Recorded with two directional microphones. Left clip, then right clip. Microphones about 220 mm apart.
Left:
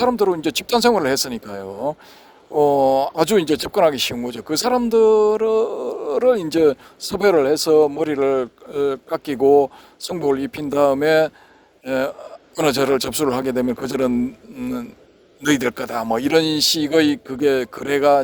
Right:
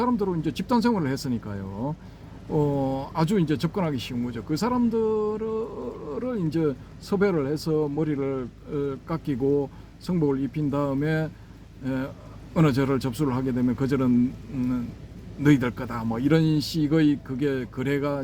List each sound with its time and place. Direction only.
0.0 s speech: 50° left (ahead or behind)
15.4 s speech: 50° left (ahead or behind)